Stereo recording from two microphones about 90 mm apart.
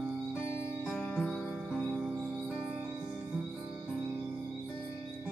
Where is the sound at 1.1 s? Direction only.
10° left (ahead or behind).